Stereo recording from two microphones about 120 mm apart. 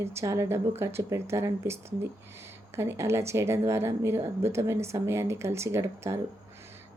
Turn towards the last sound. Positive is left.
turn(degrees=-25)  # may be behind; listen again after turning